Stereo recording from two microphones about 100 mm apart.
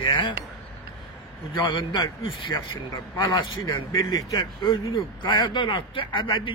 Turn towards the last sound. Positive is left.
turn(degrees=55)  # may be behind; listen again after turning